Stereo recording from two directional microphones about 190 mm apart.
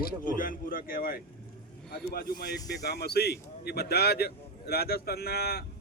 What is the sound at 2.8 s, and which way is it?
A man's voice, 60° left (ahead or behind).